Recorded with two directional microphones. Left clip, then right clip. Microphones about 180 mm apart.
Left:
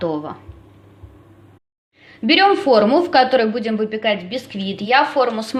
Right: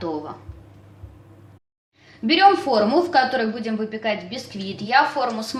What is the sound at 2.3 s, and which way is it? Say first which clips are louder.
A woman's voice: left 2 dB; 40° left (ahead or behind).